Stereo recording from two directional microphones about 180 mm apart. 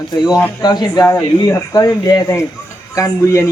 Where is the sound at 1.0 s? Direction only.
10° left (ahead or behind).